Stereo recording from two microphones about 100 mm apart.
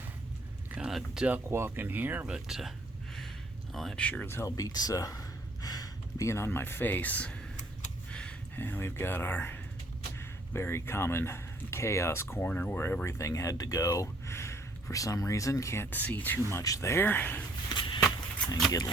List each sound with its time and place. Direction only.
0.8 s speech: 5° right (ahead or behind)
1.3 s speech: 25° right (ahead or behind); by 4.3 s 10° left (ahead or behind)
4.3 s speech: 25° left (ahead or behind)
4.5 s speech: 40° left (ahead or behind); by 7.3 s 15° left (ahead or behind)
8.1 s a sound: 10° left (ahead or behind)
8.5 s speech: 20° left (ahead or behind)
13.1 s speech: 30° left (ahead or behind); by 16.4 s 15° left (ahead or behind)
16.5 s speech: 30° left (ahead or behind)
17.7 s a sound: 55° left (ahead or behind)